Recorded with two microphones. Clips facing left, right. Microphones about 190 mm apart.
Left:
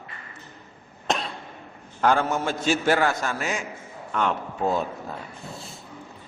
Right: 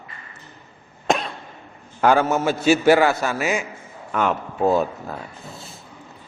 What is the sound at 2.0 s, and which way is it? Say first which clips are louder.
A man's voice: right 5 dB; 5° right (ahead or behind).